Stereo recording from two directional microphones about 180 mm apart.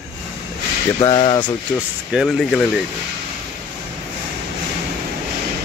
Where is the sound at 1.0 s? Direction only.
25° left (ahead or behind).